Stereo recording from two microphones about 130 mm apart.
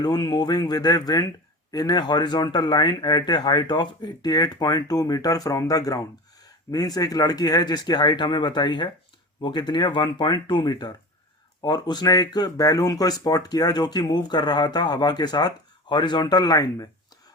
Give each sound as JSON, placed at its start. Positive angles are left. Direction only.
{"t": 0.0, "sound": "speech", "side_deg": 30}